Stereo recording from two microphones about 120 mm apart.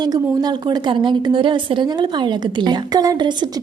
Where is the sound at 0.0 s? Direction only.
35° right (ahead or behind).